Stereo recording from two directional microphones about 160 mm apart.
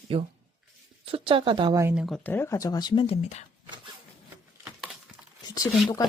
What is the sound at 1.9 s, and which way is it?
Speech, centre (ahead or behind).